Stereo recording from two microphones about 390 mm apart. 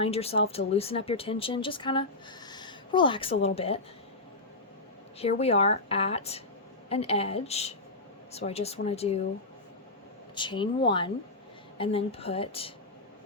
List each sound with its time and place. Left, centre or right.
0.0 s speech: centre
5.2 s speech: centre
10.3 s speech: centre